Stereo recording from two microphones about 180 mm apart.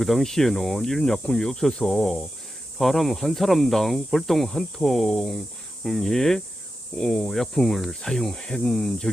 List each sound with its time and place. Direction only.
0.0 s speech: centre (ahead or behind)